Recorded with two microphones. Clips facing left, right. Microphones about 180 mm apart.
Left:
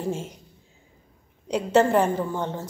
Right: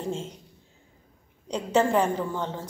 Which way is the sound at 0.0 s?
10° left (ahead or behind).